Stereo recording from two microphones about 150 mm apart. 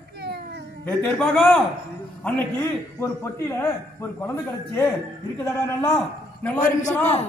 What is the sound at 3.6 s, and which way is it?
A man's voice, 15° left (ahead or behind).